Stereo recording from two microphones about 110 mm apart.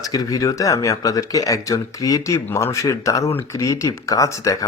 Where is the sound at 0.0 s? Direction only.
35° left (ahead or behind).